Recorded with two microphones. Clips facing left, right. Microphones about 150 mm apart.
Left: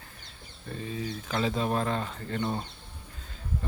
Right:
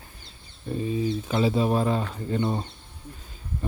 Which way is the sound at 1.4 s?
10° right (ahead or behind).